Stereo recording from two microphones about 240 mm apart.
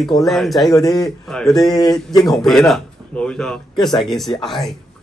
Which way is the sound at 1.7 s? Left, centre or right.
Centre.